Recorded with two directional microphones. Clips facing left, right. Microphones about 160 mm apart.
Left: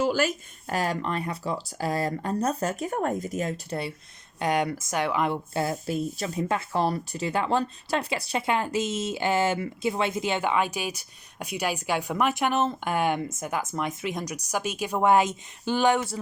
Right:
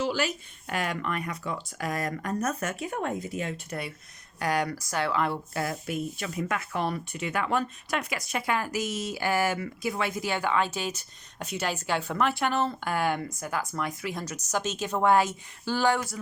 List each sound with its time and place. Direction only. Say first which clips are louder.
0.0 s speech: left 4 dB; 45° left (ahead or behind); by 16.1 s 20° left (ahead or behind)